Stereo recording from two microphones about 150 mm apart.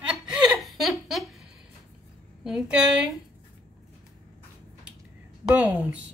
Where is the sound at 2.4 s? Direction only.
5° right (ahead or behind).